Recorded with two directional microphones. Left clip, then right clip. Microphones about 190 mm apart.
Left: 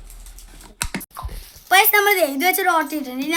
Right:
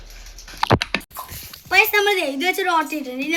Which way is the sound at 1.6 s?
20° left (ahead or behind).